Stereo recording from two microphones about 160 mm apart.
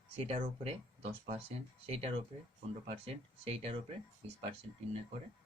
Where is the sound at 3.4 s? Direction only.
35° right (ahead or behind).